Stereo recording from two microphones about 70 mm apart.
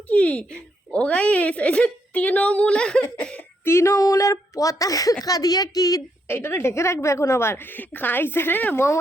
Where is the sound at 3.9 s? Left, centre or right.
Left.